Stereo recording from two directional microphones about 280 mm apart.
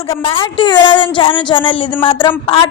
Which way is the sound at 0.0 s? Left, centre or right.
Centre.